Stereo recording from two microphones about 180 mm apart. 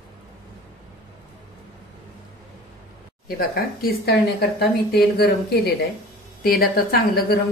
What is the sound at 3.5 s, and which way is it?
Speech, 55° left (ahead or behind).